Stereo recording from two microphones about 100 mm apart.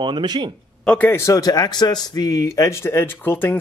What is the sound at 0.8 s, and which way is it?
Speech, 20° left (ahead or behind).